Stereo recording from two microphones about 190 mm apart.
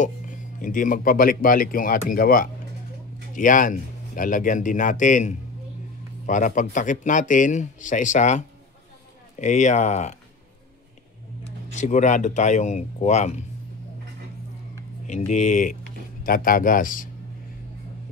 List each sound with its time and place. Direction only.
0.0 s speech: 40° left (ahead or behind)
11.4 s speech: 40° left (ahead or behind)
15.0 s speech: 40° left (ahead or behind)